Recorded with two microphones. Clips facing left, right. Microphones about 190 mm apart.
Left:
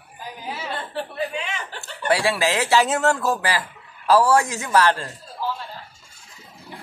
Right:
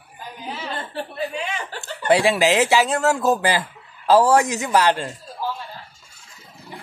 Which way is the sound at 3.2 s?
20° right (ahead or behind).